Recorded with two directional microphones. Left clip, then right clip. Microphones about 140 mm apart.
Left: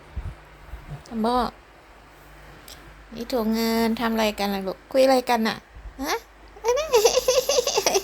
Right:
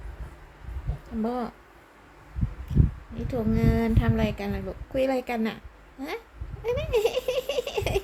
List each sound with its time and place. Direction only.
1.2 s speech: 25° left (ahead or behind)
3.2 s a woman's voice: 35° left (ahead or behind); by 6.1 s 20° left (ahead or behind)
6.6 s baby laughter: 15° left (ahead or behind)